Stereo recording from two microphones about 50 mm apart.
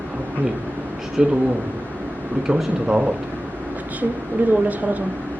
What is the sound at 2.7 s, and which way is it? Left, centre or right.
Speech, right.